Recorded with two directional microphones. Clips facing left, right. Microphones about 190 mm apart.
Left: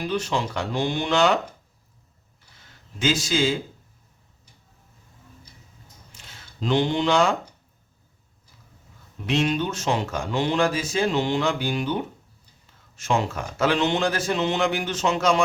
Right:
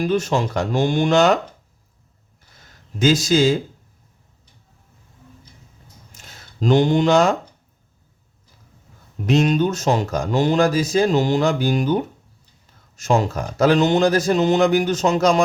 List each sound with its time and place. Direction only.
0.0 s speech: 45° right (ahead or behind)
3.0 s speech: 40° right (ahead or behind)
6.1 s speech: 45° right (ahead or behind)
9.2 s speech: 40° right (ahead or behind)